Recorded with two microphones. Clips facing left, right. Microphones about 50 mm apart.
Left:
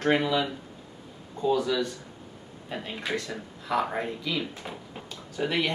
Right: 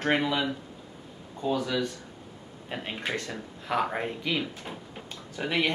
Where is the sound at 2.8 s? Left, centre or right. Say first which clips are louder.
Left 1 dB; right.